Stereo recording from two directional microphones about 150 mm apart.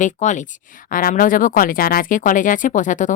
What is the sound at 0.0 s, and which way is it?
Speech, 55° left (ahead or behind).